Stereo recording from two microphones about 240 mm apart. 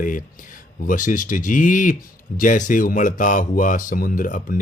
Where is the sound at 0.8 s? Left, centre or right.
Left.